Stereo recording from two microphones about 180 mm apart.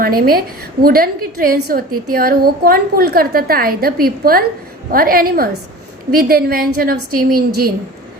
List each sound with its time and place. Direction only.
0.0 s a woman's voice: 55° right (ahead or behind)